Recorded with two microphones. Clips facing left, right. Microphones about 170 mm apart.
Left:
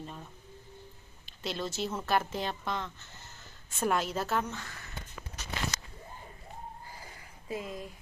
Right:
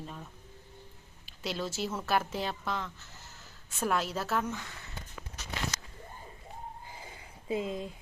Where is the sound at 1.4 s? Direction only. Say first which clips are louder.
Even; 5° right (ahead or behind).